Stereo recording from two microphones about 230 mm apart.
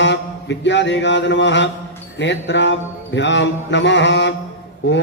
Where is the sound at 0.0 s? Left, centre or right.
Left.